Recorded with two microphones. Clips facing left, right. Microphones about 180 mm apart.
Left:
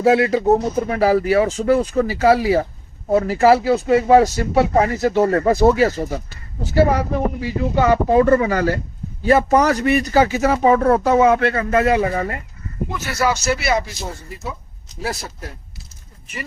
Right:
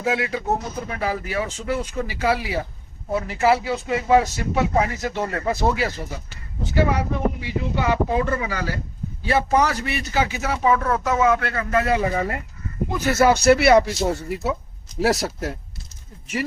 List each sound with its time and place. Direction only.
0.0 s speech: 40° left (ahead or behind)
12.1 s speech: centre (ahead or behind)
13.1 s speech: 55° right (ahead or behind)
15.0 s speech: 85° right